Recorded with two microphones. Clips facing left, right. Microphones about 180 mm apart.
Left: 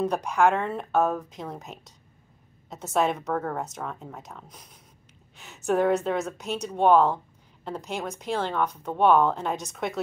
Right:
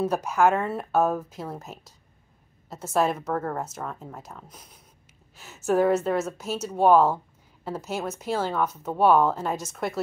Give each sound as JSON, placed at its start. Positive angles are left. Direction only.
{"t": 0.0, "sound": "speech", "side_deg": -5}